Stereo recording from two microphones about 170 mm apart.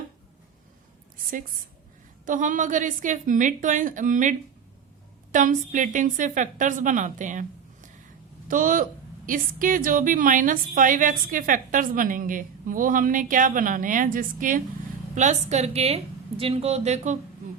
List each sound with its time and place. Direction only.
2.2 s a woman's voice: 50° right (ahead or behind)